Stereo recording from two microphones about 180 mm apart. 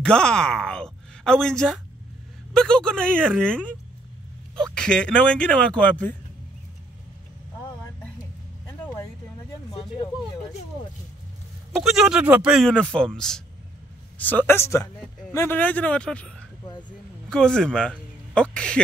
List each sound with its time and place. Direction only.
0.0 s speech: 5° left (ahead or behind)
8.6 s vehicle: 15° left (ahead or behind)
11.7 s speech: centre (ahead or behind)